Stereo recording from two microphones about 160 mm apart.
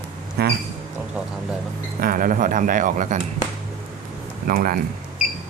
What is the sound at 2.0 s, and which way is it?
Speech, 60° right (ahead or behind).